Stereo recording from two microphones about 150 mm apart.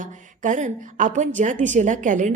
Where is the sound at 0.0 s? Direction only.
55° right (ahead or behind).